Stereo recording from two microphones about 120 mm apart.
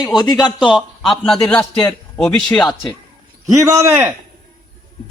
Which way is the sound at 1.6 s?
30° left (ahead or behind).